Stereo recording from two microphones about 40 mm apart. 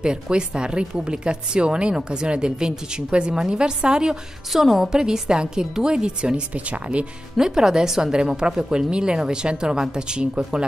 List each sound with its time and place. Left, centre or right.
0.0 s a woman's voice: right
4.5 s a woman's voice: centre; by 6.4 s right
6.5 s speech: right
7.3 s a woman's voice: centre